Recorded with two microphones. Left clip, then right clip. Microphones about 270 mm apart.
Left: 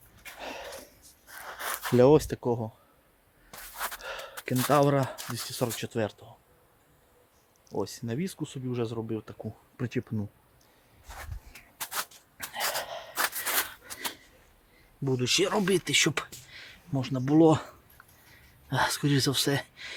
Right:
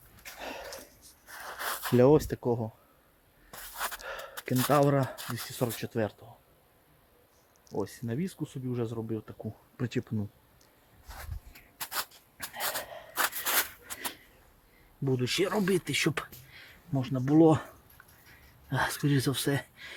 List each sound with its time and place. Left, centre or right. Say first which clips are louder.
0.2 s a sound: left 1 dB; centre
2.1 s speech: left 2 dB; centre
3.5 s spray: even; centre
4.0 s gasp: left 1 dB; centre
4.4 s speech: left 1 dB; centre
7.7 s speech: left 2 dB; centre
8.0 s speech: left 2 dB; centre
9.7 s speech: left 1 dB; centre
11.8 s a sound: left 1 dB; centre
13.1 s scissors: even; centre
15.0 s speech: left 3 dB; centre
16.9 s speech: left 1 dB; centre